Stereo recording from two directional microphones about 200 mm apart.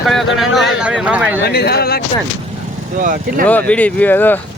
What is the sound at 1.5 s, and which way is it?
Speech, 50° left (ahead or behind).